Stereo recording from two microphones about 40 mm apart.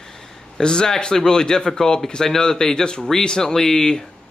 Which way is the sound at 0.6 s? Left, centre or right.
Centre.